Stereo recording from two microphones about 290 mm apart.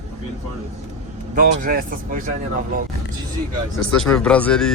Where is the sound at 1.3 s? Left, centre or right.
Right.